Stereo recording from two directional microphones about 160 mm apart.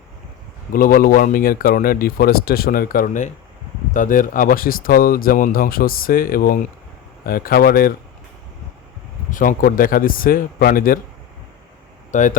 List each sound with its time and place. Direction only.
0.7 s speech: 60° left (ahead or behind)
9.3 s speech: 55° left (ahead or behind)
12.1 s speech: 50° left (ahead or behind)